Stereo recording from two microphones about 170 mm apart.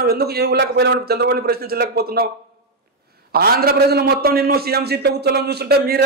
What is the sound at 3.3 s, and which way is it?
A man's voice, 65° right (ahead or behind).